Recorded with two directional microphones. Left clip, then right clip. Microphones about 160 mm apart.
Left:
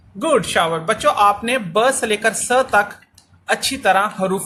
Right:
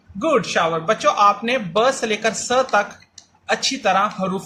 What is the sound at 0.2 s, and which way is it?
Speech, 35° left (ahead or behind).